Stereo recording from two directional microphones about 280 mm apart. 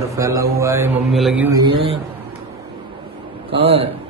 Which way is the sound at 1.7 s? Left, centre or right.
Centre.